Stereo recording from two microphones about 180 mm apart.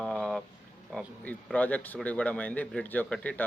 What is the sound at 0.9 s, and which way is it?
Speech, 5° left (ahead or behind).